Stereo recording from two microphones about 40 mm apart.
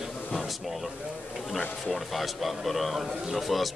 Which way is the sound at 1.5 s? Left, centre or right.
Centre.